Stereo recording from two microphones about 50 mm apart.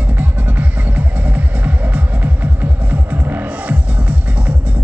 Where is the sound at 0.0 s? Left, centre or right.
Right.